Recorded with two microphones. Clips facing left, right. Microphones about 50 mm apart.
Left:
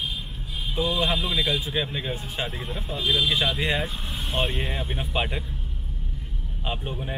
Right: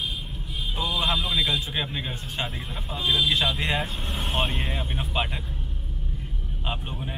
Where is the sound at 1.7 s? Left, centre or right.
Centre.